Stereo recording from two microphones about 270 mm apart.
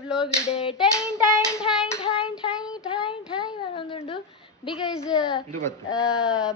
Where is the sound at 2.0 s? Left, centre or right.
Left.